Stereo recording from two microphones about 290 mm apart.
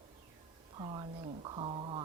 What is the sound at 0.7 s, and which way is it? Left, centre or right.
Speech, centre.